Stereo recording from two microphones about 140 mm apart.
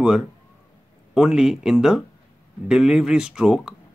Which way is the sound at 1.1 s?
5° right (ahead or behind).